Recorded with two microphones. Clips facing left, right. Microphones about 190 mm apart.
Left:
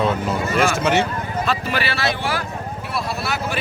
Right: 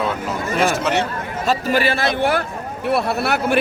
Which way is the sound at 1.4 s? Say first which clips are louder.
Right 8 dB; 45° right (ahead or behind).